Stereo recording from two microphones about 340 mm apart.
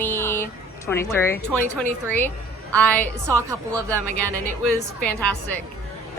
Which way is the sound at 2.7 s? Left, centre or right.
Centre.